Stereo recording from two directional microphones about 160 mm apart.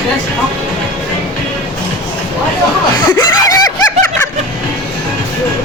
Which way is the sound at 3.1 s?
20° left (ahead or behind).